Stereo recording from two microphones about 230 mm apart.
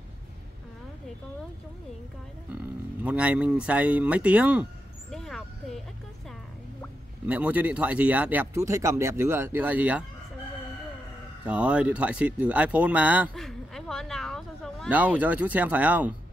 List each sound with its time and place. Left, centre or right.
2.5 s speech: centre
5.1 s vehicle: centre
7.2 s speech: centre
11.4 s speech: centre